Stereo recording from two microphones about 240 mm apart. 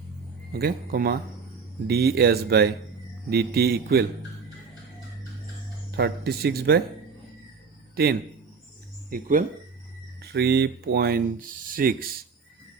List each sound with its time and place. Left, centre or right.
0.5 s speech: right
6.0 s speech: right
9.0 s speech: right